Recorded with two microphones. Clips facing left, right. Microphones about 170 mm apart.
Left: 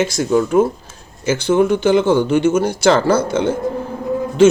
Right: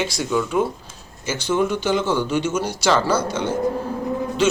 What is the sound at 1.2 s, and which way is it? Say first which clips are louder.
Speech: left 7 dB; 55° left (ahead or behind).